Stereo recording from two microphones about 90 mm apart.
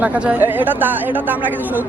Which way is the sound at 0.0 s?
15° right (ahead or behind).